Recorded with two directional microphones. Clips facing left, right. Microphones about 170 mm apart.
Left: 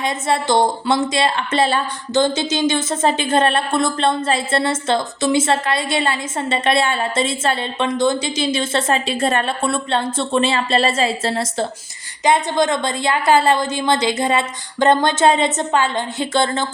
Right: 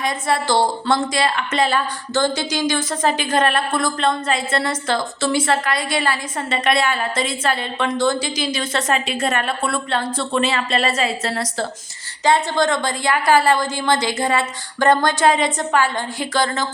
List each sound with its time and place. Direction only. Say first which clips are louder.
0.0 s a woman's voice: left 1 dB; 25° left (ahead or behind)